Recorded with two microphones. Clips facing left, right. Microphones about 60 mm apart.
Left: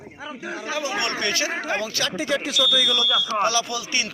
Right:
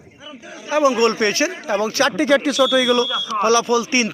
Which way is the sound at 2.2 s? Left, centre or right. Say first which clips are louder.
Right 7 dB; right.